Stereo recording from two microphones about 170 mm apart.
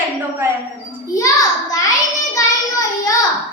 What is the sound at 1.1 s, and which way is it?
Speech, 20° left (ahead or behind).